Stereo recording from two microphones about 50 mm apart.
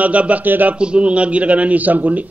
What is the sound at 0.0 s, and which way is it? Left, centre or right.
Speech, right.